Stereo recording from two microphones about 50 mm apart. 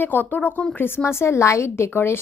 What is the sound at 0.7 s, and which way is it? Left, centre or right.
Speech, left.